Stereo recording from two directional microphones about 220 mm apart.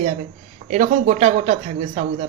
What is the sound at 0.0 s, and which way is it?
A man's voice, 30° right (ahead or behind).